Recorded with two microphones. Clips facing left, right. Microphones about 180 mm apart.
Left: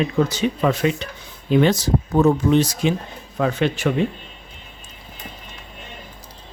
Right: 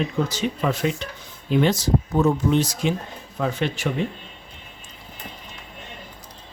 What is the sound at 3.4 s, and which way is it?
Speech, 60° left (ahead or behind).